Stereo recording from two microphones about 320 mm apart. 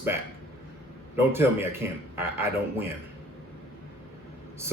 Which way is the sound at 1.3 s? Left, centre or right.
Centre.